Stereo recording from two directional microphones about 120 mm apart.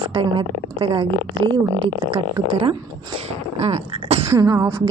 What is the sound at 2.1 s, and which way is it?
Speech, 45° right (ahead or behind).